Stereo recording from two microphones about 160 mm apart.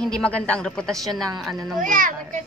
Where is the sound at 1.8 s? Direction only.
55° right (ahead or behind).